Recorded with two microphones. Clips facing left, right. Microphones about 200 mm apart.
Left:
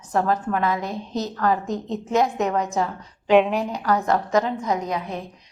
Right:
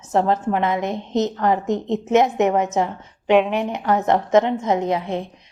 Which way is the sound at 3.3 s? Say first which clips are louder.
Even; centre (ahead or behind).